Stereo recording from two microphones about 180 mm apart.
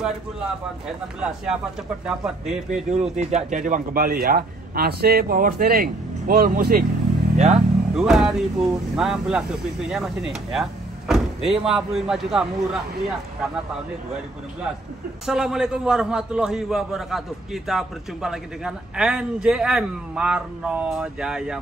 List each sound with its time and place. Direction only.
0.8 s a man's voice: 5° right (ahead or behind)
3.0 s a man's voice: 35° right (ahead or behind); by 6.9 s 55° right (ahead or behind)
7.3 s speech: 35° right (ahead or behind)
7.9 s a man's voice: 5° right (ahead or behind)
15.2 s a man's voice: 5° right (ahead or behind)